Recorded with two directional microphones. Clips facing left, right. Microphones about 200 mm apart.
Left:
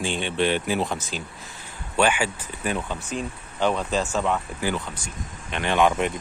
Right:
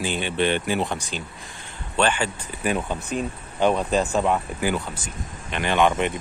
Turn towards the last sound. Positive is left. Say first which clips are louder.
# even
turn(degrees=0)  # may be behind; listen again after turning